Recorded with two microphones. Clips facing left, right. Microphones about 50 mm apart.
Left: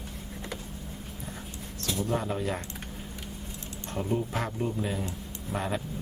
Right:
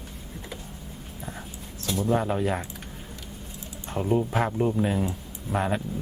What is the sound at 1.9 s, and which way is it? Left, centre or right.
Speech, right.